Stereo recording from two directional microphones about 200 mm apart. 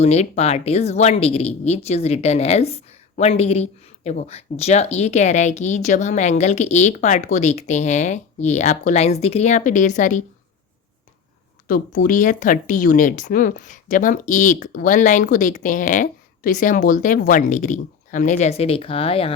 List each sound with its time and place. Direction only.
0.0 s speech: 30° left (ahead or behind)
11.7 s speech: 40° left (ahead or behind)